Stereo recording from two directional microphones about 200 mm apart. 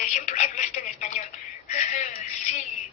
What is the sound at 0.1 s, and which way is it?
Telephone, 35° left (ahead or behind).